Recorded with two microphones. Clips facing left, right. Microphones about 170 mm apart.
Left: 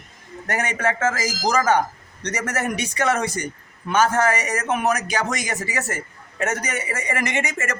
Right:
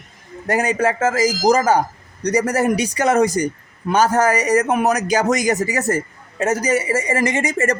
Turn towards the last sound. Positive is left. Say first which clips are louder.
# right 7 dB
turn(degrees=-35)  # may be behind; listen again after turning